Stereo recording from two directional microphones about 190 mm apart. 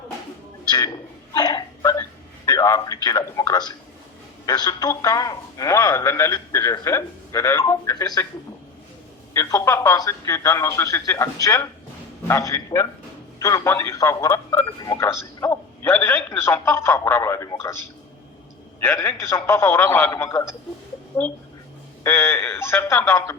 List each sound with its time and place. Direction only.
1.4 s a man's voice: 20° left (ahead or behind)
9.3 s a man's voice: 15° left (ahead or behind)
18.8 s a man's voice: 15° left (ahead or behind)